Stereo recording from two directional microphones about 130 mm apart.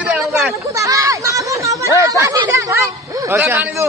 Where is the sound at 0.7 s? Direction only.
25° right (ahead or behind).